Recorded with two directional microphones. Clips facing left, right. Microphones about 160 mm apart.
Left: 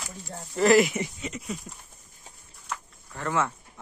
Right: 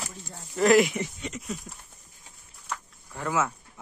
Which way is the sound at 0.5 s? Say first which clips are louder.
Even; centre (ahead or behind).